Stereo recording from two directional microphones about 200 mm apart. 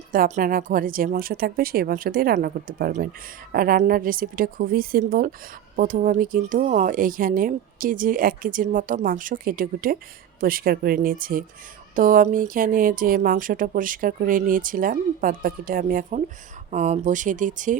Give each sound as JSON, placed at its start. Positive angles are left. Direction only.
{"t": 0.1, "sound": "speech", "side_deg": -40}